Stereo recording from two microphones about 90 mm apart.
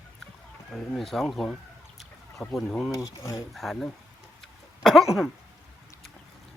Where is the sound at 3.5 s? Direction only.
Centre (ahead or behind).